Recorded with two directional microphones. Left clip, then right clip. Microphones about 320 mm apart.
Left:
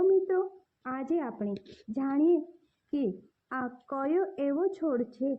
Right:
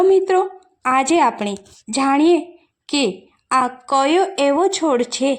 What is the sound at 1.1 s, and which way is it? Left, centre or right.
Speech, right.